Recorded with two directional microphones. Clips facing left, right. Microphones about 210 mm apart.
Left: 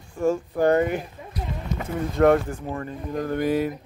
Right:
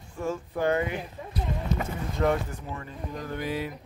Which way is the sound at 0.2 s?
45° left (ahead or behind).